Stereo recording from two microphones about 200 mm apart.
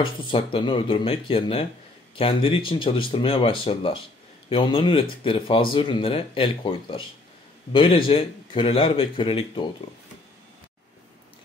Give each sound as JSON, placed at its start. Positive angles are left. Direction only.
{"t": 0.0, "sound": "speech", "side_deg": 25}